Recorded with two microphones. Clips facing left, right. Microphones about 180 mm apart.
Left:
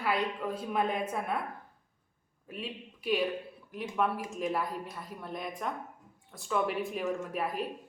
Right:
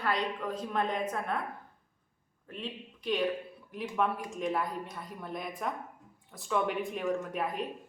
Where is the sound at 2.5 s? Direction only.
10° left (ahead or behind).